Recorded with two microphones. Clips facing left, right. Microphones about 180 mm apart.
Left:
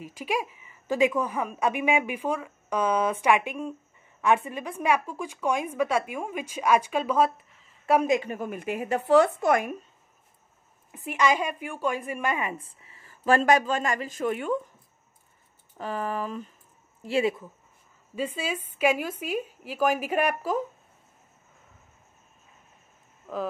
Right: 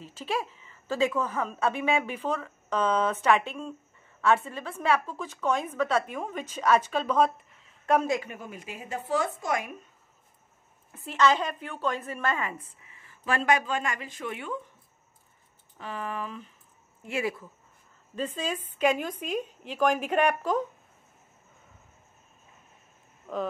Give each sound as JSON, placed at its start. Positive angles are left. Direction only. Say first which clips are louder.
{"t": 0.0, "sound": "a woman's voice", "louder": "left 2 dB", "side_deg": 15}
{"t": 8.3, "sound": "speech", "louder": "left 9 dB", "side_deg": 55}
{"t": 10.9, "sound": "a woman's voice", "louder": "even", "side_deg": 15}
{"t": 12.5, "sound": "speech", "louder": "left 2 dB", "side_deg": 35}
{"t": 15.8, "sound": "speech", "louder": "left 5 dB", "side_deg": 40}
{"t": 17.0, "sound": "speech", "louder": "left 6 dB", "side_deg": 25}
{"t": 18.1, "sound": "a woman's voice", "louder": "left 1 dB", "side_deg": 10}
{"t": 23.3, "sound": "speech", "louder": "even", "side_deg": 5}